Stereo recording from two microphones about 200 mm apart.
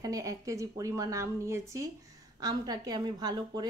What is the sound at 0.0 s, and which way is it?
Speech, 15° right (ahead or behind).